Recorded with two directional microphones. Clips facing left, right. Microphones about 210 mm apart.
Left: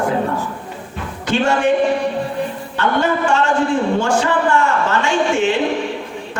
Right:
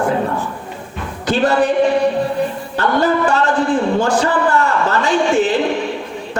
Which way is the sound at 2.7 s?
35° right (ahead or behind).